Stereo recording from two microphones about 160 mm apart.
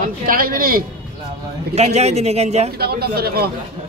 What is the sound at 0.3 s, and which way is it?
Speech, 65° right (ahead or behind).